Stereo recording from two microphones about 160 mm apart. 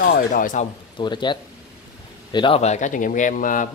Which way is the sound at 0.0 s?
55° left (ahead or behind).